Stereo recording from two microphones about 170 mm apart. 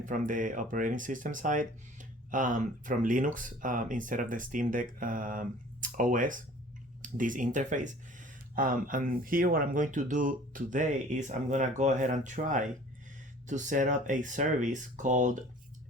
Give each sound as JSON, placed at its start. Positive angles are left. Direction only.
{"t": 0.0, "sound": "speech", "side_deg": -50}